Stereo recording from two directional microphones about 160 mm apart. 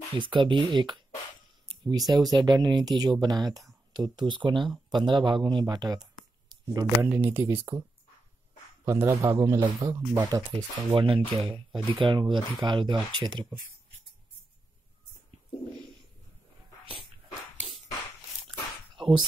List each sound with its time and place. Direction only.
0.1 s speech: 30° right (ahead or behind)
6.5 s a sound: 25° right (ahead or behind)
7.0 s speech: 10° right (ahead or behind)
8.8 s speech: 15° right (ahead or behind)
10.5 s speech: 30° right (ahead or behind)